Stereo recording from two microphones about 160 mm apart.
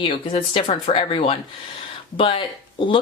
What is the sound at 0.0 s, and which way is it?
Speech, 30° left (ahead or behind).